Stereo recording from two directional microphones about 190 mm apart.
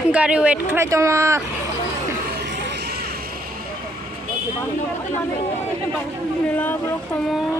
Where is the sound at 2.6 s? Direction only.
60° right (ahead or behind).